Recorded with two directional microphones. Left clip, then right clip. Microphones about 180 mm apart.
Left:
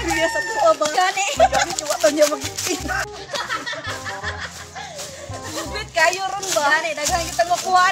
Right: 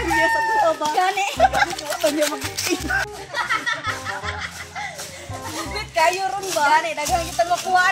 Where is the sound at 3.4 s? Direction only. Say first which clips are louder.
Right 7 dB; 10° left (ahead or behind).